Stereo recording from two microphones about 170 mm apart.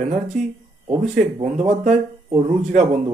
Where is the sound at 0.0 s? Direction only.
45° right (ahead or behind).